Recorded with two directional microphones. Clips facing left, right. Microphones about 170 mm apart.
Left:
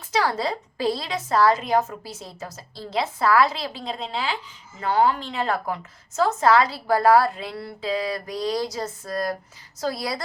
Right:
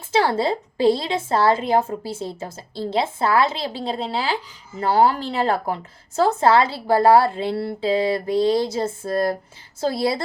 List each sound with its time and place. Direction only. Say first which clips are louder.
0.1 s a woman's voice: right 4 dB; 30° right (ahead or behind)